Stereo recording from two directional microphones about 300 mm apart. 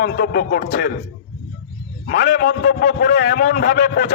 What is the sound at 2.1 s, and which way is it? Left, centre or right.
A man's voice, left.